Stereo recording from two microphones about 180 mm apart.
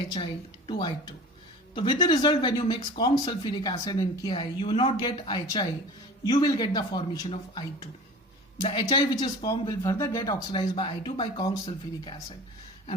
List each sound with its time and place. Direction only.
0.7 s speech: 25° left (ahead or behind)